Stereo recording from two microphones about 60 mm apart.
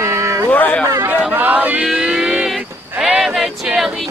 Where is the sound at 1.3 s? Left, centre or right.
Right.